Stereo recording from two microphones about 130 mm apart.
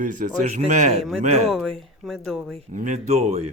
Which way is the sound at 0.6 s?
70° right (ahead or behind).